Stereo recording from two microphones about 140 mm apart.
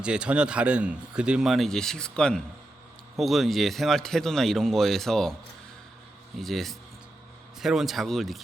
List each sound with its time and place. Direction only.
0.0 s speech: 5° right (ahead or behind)
6.3 s speech: centre (ahead or behind)